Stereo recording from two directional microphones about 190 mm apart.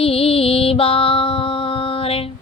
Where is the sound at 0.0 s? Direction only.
30° left (ahead or behind).